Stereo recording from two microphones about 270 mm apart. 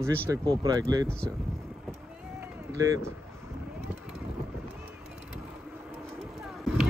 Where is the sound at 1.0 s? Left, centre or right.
Centre.